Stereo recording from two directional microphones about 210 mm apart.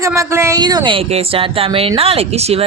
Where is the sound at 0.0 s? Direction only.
15° right (ahead or behind).